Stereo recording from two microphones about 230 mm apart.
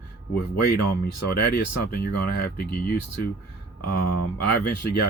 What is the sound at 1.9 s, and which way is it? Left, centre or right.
Speech, left.